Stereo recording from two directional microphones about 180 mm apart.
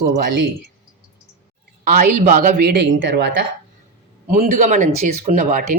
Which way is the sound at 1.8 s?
45° right (ahead or behind).